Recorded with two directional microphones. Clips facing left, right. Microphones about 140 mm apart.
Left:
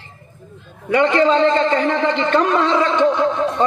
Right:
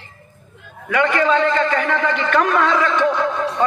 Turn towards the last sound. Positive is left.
turn(degrees=20)  # may be behind; listen again after turning